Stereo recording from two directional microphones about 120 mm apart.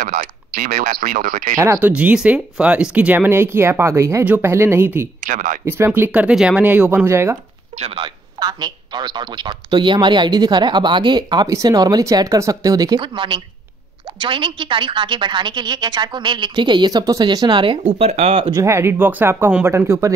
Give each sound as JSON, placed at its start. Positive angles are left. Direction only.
{"t": 1.0, "sound": "speech", "side_deg": -90}
{"t": 1.6, "sound": "speech", "side_deg": -15}
{"t": 5.2, "sound": "speech", "side_deg": -90}
{"t": 5.7, "sound": "speech", "side_deg": -20}
{"t": 7.7, "sound": "speech", "side_deg": -60}
{"t": 8.0, "sound": "speech", "side_deg": -35}
{"t": 17.8, "sound": "speech", "side_deg": -55}
{"t": 18.5, "sound": "speech", "side_deg": -25}